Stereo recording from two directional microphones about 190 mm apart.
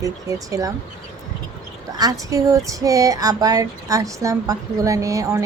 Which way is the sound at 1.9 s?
20° right (ahead or behind).